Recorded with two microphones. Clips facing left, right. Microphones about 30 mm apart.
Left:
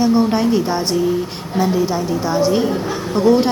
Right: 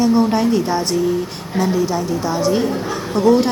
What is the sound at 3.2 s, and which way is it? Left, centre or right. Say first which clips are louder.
Speech: even; left.